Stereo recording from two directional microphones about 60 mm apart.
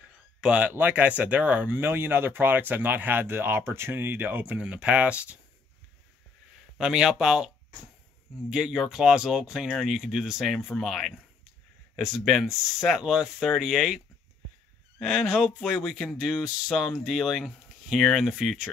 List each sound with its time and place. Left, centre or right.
0.4 s speech: centre; by 4.5 s right
4.5 s speech: centre
6.8 s speech: centre